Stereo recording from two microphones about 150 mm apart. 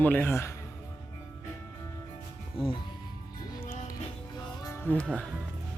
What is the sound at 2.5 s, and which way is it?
Speech, 35° left (ahead or behind).